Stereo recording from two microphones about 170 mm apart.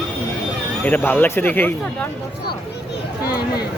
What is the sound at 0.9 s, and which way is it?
Speech, 10° left (ahead or behind).